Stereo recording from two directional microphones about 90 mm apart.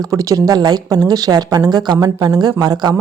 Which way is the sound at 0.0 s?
40° right (ahead or behind).